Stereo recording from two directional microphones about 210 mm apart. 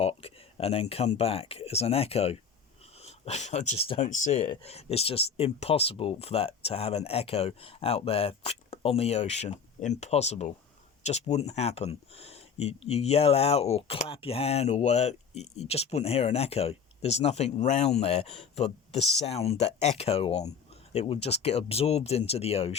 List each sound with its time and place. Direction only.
0.0 s speech: 30° left (ahead or behind)